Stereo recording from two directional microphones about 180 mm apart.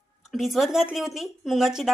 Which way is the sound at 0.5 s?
Centre (ahead or behind).